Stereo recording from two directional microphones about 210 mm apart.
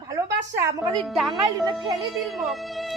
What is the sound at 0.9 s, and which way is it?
Speech, centre (ahead or behind).